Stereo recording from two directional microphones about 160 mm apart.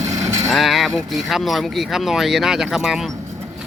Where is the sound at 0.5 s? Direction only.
Centre (ahead or behind).